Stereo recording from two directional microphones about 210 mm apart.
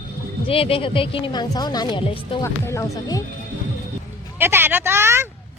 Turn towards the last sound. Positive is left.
turn(degrees=-10)  # may be behind; listen again after turning